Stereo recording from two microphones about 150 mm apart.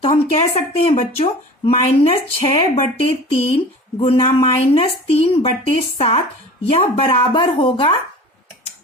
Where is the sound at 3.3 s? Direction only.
40° left (ahead or behind).